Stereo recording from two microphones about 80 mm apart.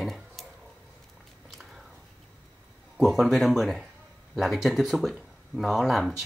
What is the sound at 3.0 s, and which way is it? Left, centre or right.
Speech, centre.